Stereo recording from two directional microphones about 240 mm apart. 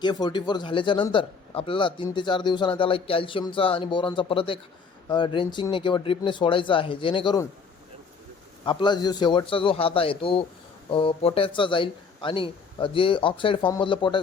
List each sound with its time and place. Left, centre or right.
0.0 s a man's voice: centre
8.6 s a man's voice: centre